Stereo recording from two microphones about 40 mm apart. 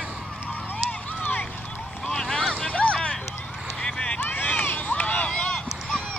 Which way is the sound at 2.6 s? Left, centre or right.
Left.